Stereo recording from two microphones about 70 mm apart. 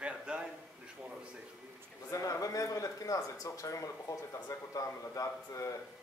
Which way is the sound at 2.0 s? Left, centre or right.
Left.